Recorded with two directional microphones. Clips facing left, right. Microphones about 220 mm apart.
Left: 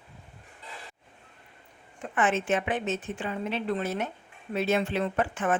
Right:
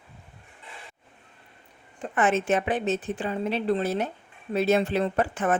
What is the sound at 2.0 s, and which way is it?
A woman's voice, 40° right (ahead or behind).